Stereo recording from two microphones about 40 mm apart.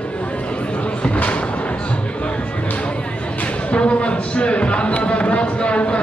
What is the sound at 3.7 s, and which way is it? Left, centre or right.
Speech, left.